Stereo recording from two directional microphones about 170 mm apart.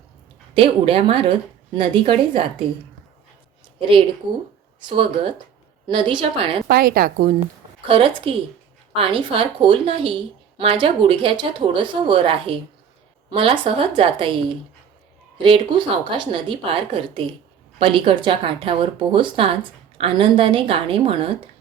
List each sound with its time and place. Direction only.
0.5 s speech: 30° right (ahead or behind)
3.8 s a woman's voice: 30° right (ahead or behind)
6.7 s speech: 60° right (ahead or behind)
7.9 s speech: 30° right (ahead or behind)
15.4 s speech: 30° right (ahead or behind)